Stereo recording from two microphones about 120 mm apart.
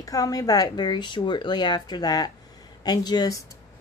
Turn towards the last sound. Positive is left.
turn(degrees=30)  # may be behind; listen again after turning